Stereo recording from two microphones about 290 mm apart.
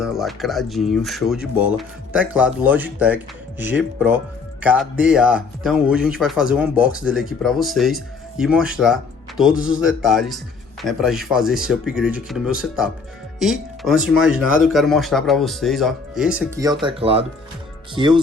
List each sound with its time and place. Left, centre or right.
0.0 s speech: centre
16.8 s speech: centre